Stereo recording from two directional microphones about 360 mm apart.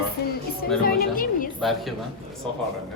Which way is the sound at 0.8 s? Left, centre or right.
Left.